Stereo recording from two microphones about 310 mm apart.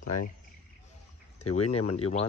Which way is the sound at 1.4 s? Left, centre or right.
Left.